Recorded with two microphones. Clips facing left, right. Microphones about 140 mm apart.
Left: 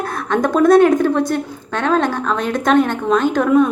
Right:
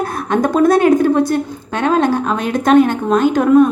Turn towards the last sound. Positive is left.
turn(degrees=-5)  # may be behind; listen again after turning